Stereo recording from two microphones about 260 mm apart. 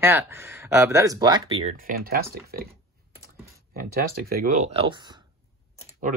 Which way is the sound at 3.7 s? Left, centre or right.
Right.